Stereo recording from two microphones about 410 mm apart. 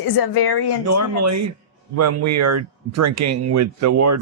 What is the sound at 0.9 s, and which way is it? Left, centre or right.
Speech, right.